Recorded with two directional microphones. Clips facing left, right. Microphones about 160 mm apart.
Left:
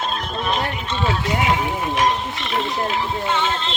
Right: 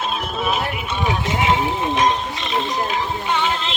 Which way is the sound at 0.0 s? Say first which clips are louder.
Right 1 dB; 5° right (ahead or behind).